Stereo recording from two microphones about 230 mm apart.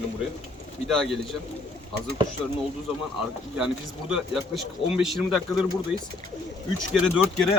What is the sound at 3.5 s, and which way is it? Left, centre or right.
Speech, centre.